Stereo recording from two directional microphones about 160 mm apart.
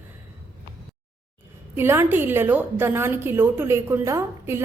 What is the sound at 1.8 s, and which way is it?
A woman's voice, 15° right (ahead or behind).